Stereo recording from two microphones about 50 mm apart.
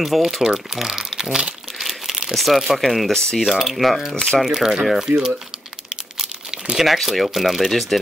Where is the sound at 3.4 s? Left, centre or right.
Centre.